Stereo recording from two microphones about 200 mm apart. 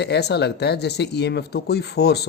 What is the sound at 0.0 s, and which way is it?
A man's voice, 55° left (ahead or behind).